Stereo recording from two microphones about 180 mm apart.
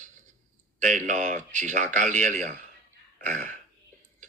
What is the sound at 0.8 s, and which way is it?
Speech, 45° right (ahead or behind).